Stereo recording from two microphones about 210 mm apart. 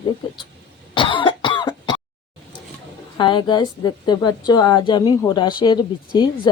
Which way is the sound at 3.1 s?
20° left (ahead or behind).